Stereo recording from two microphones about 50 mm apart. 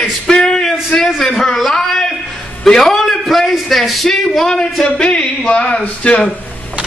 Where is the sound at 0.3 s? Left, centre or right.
Centre.